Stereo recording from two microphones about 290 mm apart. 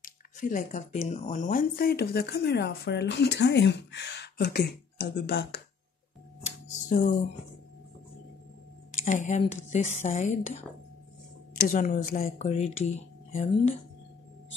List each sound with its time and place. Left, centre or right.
0.0 s squish: left
1.0 s speech: left
6.4 s music: left
9.0 s speech: left
11.6 s speech: left